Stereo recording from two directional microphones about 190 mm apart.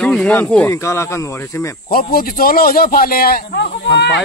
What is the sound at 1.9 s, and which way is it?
A man's voice, 50° left (ahead or behind).